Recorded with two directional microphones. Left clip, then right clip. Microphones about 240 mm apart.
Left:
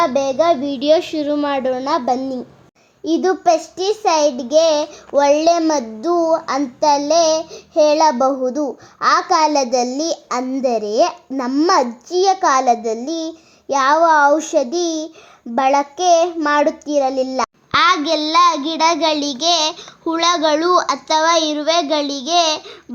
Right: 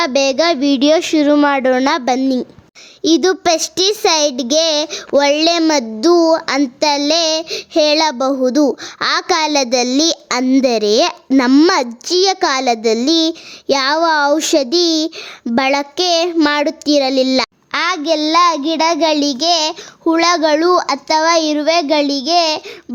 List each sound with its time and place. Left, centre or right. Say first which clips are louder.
0.4 s a child's voice: right 2 dB; right
3.2 s a child's voice: right 1 dB; right
12.2 s a child's voice: left 2 dB; right
17.8 s child singing: right 2 dB; right